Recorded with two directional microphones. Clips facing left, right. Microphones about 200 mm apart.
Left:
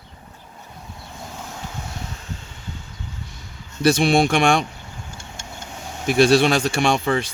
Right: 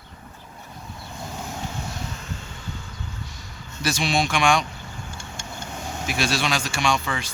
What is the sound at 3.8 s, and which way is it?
Speech, 55° left (ahead or behind).